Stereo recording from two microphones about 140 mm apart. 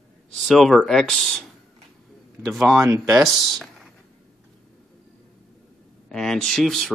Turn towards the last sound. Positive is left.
turn(degrees=0)  # may be behind; listen again after turning